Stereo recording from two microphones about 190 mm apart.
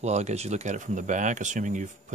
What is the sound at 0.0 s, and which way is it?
Speech, 35° right (ahead or behind).